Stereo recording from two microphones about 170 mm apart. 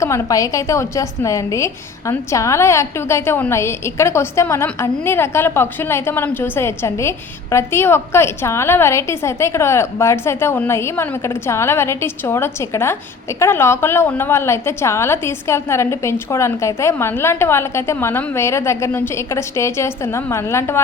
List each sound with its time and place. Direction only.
0.0 s a woman's voice: 20° left (ahead or behind)